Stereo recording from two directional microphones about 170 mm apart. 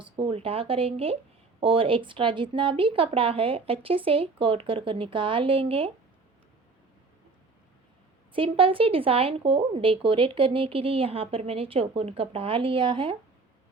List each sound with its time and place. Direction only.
0.0 s speech: 30° right (ahead or behind)
8.3 s speech: 30° right (ahead or behind)